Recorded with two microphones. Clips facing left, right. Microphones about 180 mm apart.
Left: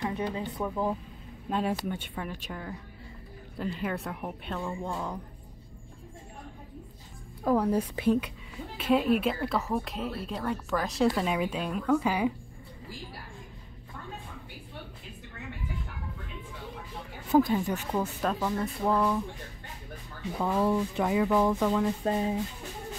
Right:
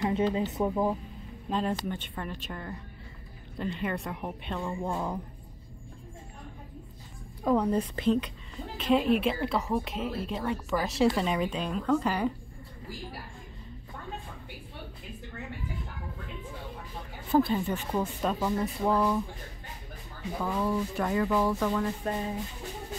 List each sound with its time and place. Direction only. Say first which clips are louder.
0.1 s speech: right 5 dB; 20° right (ahead or behind)
1.5 s a woman's voice: even; 5° left (ahead or behind); by 5.2 s 10° right (ahead or behind)
7.4 s a woman's voice: even; 5° left (ahead or behind)
17.3 s speech: left 1 dB; 10° left (ahead or behind)
18.2 s a woman's voice: right 1 dB; 5° right (ahead or behind)
20.7 s speech: left 2 dB; 15° left (ahead or behind)
22.0 s speech: left 4 dB; 25° left (ahead or behind)